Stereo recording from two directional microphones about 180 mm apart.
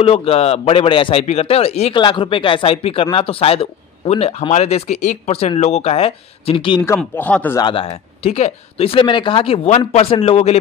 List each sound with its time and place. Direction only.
0.0 s speech: 35° left (ahead or behind)
7.0 s speech: 5° left (ahead or behind)
7.6 s speech: 30° left (ahead or behind)